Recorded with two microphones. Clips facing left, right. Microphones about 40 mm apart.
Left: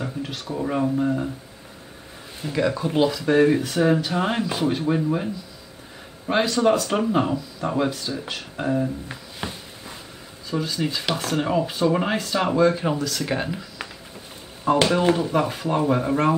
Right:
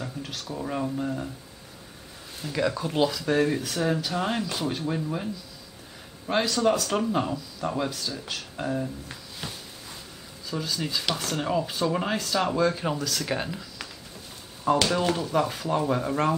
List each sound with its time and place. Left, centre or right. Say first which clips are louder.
0.0 s speech: left 5 dB; centre
2.4 s speech: left 4 dB; centre